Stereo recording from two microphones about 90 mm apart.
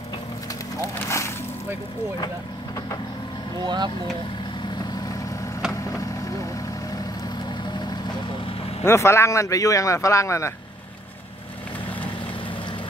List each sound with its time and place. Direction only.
0.9 s speech: 30° left (ahead or behind)
2.1 s speech: 45° left (ahead or behind)
3.6 s speech: 55° right (ahead or behind)
5.7 s vehicle: 35° left (ahead or behind)
8.8 s speech: 30° left (ahead or behind)